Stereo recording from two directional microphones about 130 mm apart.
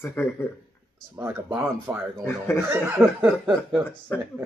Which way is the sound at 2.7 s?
15° right (ahead or behind).